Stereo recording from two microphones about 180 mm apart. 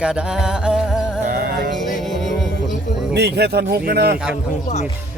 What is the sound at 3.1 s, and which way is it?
A man's voice, 65° right (ahead or behind).